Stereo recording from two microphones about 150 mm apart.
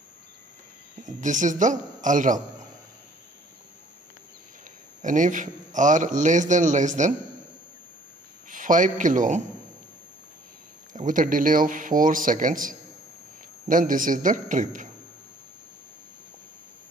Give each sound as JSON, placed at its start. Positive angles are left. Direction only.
{"t": 1.0, "sound": "a man's voice", "side_deg": -55}
{"t": 5.0, "sound": "a man's voice", "side_deg": -60}
{"t": 8.5, "sound": "a man's voice", "side_deg": -60}
{"t": 10.9, "sound": "a man's voice", "side_deg": -60}